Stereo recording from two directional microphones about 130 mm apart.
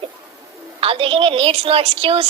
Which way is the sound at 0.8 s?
45° right (ahead or behind).